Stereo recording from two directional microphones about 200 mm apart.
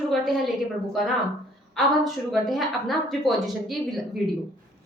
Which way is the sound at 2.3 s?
Centre (ahead or behind).